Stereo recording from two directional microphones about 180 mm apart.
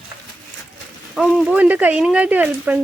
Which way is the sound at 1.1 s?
Centre (ahead or behind).